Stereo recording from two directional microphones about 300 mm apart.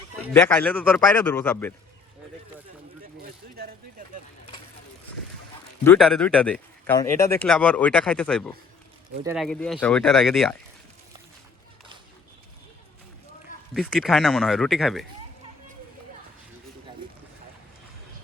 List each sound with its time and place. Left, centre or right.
0.3 s speech: centre
3.2 s a sound: right
5.8 s speech: centre
13.7 s speech: centre